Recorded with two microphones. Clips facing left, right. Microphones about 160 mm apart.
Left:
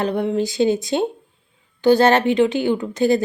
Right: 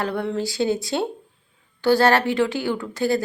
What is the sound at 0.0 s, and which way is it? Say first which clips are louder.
A woman's voice: left 4 dB; 20° left (ahead or behind).